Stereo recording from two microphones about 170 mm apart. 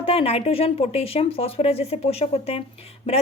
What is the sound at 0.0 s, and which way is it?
Speech, 35° left (ahead or behind).